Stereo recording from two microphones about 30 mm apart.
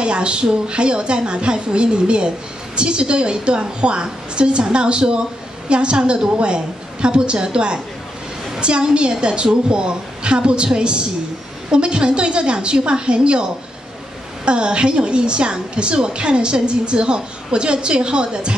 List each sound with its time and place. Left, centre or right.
0.0 s a woman's voice: right